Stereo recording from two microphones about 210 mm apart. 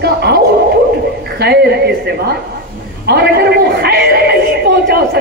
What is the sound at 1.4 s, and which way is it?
Speech, 50° right (ahead or behind).